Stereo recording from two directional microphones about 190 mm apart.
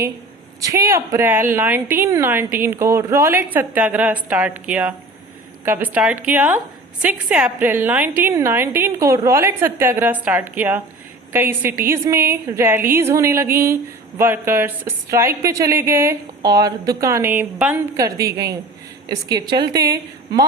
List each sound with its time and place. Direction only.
0.6 s a woman's voice: 15° right (ahead or behind)